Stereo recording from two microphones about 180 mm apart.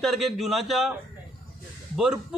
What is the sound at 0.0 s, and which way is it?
Speech, centre (ahead or behind).